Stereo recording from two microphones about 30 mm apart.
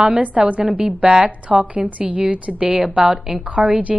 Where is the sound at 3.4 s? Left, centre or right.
Right.